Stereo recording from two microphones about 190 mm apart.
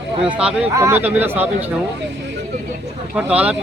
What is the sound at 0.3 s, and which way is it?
Speech, 5° right (ahead or behind).